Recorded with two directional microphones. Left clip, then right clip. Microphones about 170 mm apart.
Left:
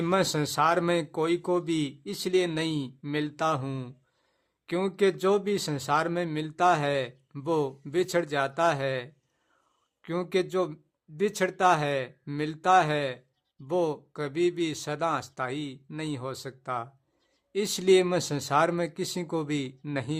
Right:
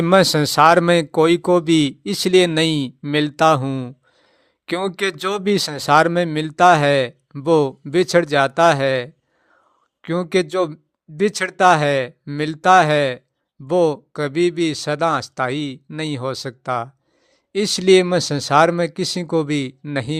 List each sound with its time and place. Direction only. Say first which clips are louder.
0.1 s speech: right 13 dB; 40° right (ahead or behind)
3.6 s speech: right 11 dB; 25° right (ahead or behind)
4.6 s speech: right 5 dB; 40° right (ahead or behind)